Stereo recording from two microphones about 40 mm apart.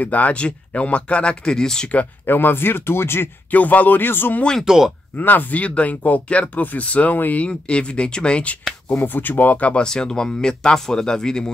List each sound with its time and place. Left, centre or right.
0.0 s speech: left
1.4 s speech: centre
2.2 s speech: left
3.5 s speech: left
4.6 s speech: centre
5.1 s speech: left
5.6 s speech: left
7.2 s speech: left
7.4 s speech: left
8.9 s speech: left
9.8 s speech: centre